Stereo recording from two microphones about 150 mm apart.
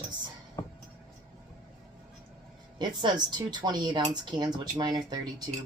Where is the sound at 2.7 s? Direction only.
30° right (ahead or behind).